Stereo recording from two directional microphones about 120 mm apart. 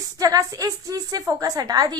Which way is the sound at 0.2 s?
30° right (ahead or behind).